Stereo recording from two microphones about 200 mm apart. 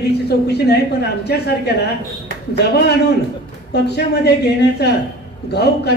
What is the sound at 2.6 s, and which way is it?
A man's voice, 55° left (ahead or behind).